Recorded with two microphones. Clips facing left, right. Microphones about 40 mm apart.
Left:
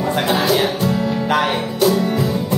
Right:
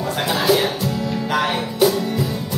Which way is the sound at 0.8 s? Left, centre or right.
Centre.